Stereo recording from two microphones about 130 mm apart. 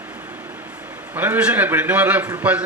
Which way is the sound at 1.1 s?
15° right (ahead or behind).